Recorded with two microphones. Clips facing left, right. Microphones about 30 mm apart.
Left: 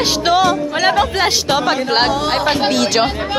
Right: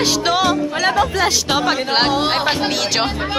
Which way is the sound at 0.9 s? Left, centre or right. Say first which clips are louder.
Left 1 dB; left.